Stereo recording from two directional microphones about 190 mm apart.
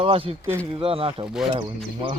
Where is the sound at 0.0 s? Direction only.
30° right (ahead or behind).